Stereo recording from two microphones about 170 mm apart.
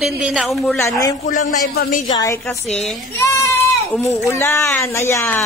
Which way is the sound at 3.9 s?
15° left (ahead or behind).